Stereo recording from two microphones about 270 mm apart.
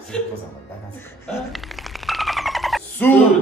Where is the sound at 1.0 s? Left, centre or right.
Centre.